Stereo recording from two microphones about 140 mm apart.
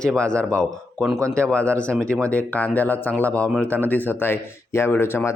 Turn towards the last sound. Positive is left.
turn(degrees=15)  # may be behind; listen again after turning